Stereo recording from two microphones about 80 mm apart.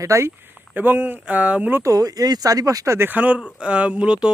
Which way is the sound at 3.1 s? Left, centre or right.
Centre.